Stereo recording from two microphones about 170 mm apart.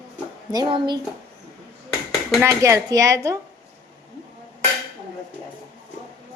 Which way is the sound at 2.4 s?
15° right (ahead or behind).